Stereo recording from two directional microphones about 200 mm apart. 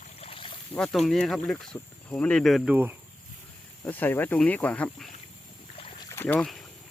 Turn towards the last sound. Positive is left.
turn(degrees=5)  # may be behind; listen again after turning